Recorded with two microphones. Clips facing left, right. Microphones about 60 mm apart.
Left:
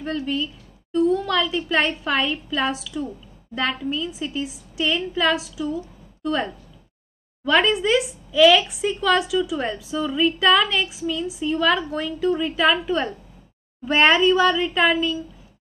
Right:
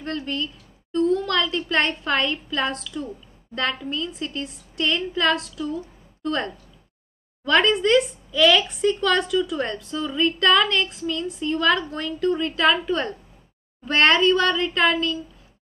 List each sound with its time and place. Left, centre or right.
0.0 s a woman's voice: centre